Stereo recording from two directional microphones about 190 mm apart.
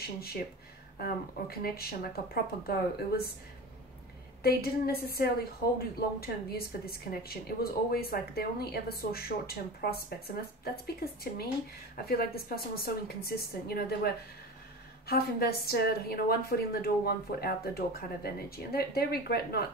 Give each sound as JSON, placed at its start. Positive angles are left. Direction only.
{"t": 0.0, "sound": "a woman's voice", "side_deg": 55}
{"t": 4.4, "sound": "a woman's voice", "side_deg": 55}